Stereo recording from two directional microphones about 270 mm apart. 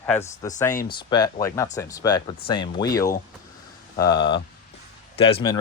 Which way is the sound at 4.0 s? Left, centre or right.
Left.